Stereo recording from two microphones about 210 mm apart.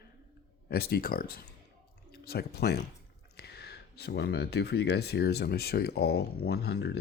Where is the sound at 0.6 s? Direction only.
50° left (ahead or behind).